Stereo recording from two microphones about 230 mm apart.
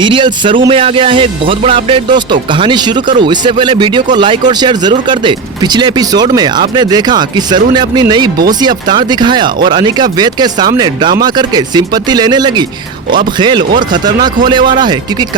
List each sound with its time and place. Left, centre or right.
0.0 s speech: right